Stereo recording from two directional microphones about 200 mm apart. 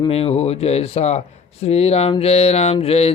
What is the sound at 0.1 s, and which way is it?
Speech, 30° left (ahead or behind).